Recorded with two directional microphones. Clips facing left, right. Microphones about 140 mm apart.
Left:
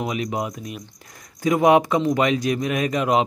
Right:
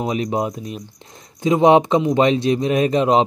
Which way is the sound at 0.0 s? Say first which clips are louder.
Right 4 dB; 35° right (ahead or behind).